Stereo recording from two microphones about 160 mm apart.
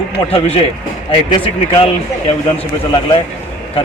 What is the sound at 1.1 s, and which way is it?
A man's voice, 35° left (ahead or behind).